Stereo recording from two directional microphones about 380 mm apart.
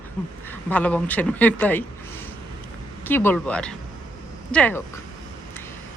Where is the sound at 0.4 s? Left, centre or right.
Centre.